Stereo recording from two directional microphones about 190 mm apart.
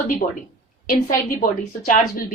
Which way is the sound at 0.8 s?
45° left (ahead or behind).